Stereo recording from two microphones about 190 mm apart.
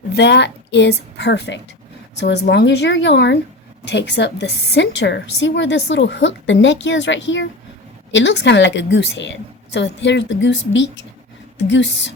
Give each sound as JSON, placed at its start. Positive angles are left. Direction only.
{"t": 0.2, "sound": "a woman's voice", "side_deg": 65}